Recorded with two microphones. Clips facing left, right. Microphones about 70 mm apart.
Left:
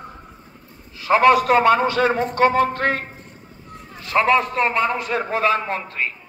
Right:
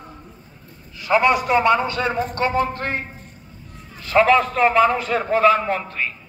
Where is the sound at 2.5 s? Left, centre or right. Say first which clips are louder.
Left 3 dB; left.